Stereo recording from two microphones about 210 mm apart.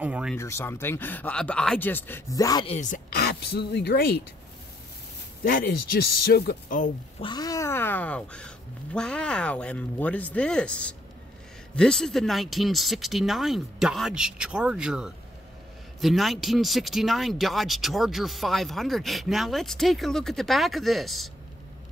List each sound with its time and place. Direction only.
0.0 s speech: 5° right (ahead or behind)
0.4 s speech: 10° left (ahead or behind); by 3.0 s 30° left (ahead or behind)
3.2 s speech: 50° left (ahead or behind)
5.4 s speech: 45° left (ahead or behind)
7.2 s speech: 20° left (ahead or behind); by 21.3 s centre (ahead or behind)